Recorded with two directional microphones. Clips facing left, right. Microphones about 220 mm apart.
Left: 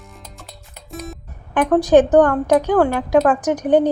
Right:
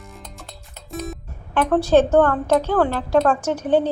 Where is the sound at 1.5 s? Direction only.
15° left (ahead or behind).